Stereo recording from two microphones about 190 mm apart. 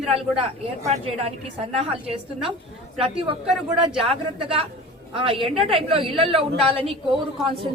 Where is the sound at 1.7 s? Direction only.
30° right (ahead or behind).